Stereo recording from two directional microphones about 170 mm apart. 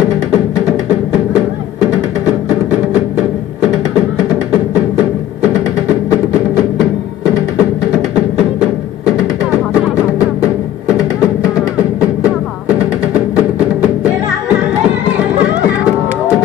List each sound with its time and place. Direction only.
13.6 s music: 5° right (ahead or behind)